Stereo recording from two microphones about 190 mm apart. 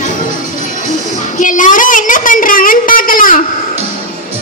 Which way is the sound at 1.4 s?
45° left (ahead or behind).